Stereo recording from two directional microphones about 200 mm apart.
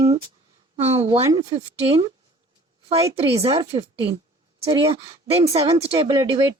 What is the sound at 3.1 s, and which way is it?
Speech, 30° right (ahead or behind).